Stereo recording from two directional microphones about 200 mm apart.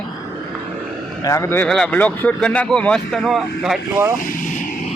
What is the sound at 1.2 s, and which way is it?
Speech, 15° left (ahead or behind).